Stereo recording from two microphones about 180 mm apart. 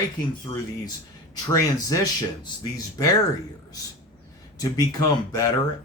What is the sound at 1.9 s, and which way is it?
Speech, 20° left (ahead or behind).